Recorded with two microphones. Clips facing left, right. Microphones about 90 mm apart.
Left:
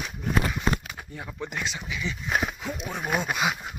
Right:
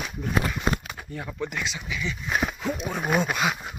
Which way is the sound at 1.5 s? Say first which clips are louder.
Right 1 dB; 30° left (ahead or behind).